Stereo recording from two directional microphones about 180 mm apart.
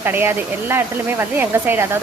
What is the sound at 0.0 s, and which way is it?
Speech, 10° right (ahead or behind).